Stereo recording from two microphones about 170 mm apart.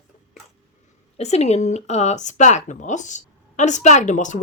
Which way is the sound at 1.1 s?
40° left (ahead or behind).